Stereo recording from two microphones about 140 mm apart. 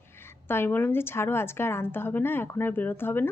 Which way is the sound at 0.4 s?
15° left (ahead or behind).